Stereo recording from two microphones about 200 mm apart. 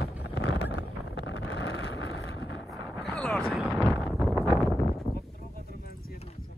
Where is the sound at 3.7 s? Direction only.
10° left (ahead or behind).